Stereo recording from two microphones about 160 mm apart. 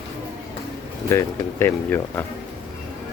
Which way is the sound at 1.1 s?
15° left (ahead or behind).